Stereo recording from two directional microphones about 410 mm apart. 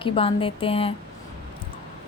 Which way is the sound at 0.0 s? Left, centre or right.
Centre.